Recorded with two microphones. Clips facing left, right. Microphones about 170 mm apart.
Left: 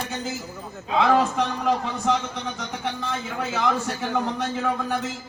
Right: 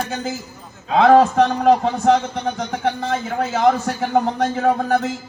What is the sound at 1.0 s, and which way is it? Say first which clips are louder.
A man's voice: right 9 dB; 60° right (ahead or behind).